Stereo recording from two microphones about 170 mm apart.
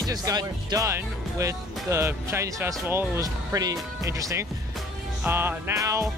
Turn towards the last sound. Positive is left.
turn(degrees=-15)  # may be behind; listen again after turning